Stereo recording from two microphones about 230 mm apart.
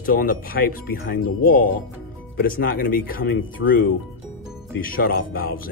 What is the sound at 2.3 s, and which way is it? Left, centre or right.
Speech, left.